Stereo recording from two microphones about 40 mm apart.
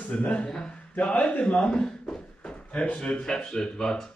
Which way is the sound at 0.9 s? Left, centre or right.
Left.